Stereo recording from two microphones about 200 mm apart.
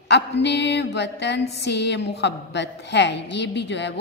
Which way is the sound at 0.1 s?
55° left (ahead or behind).